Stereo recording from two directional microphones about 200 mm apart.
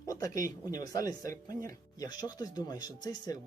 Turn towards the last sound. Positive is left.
turn(degrees=20)  # may be behind; listen again after turning